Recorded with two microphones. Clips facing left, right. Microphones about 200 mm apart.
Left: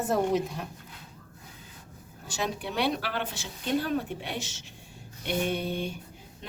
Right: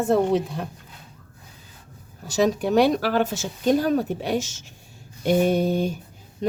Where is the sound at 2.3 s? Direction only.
40° right (ahead or behind).